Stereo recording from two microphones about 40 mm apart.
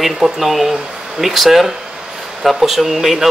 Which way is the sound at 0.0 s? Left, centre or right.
Centre.